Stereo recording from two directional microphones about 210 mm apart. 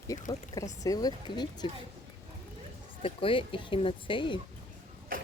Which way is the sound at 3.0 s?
25° left (ahead or behind).